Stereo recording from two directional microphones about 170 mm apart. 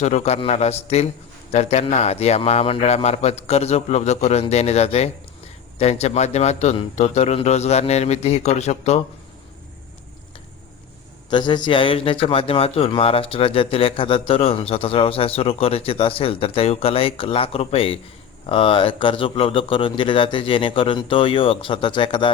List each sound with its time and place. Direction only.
0.0 s a man's voice: 40° left (ahead or behind)
11.3 s a man's voice: 25° left (ahead or behind)